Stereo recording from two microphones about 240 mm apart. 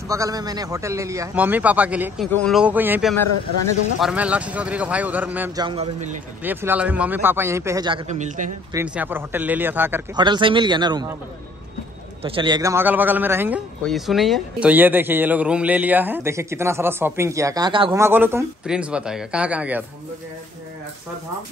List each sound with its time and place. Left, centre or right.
0.1 s a man's voice: centre
5.7 s speech: right
6.4 s a man's voice: centre; by 8.5 s right
8.7 s a man's voice: centre
12.2 s a man's voice: right; by 19.8 s centre